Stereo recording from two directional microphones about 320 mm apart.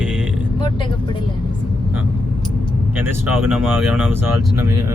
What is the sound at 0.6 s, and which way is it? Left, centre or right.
Speech, centre.